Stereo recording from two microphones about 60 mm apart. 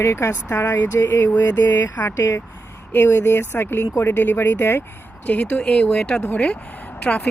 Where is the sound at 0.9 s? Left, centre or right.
Left.